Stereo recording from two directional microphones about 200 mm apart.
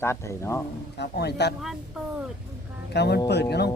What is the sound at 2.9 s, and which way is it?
Speech, 55° left (ahead or behind).